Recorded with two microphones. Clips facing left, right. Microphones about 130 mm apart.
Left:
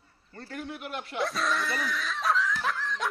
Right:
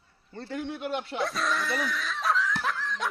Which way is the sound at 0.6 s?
25° right (ahead or behind).